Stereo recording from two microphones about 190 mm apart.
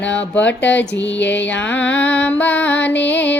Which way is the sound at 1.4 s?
10° left (ahead or behind).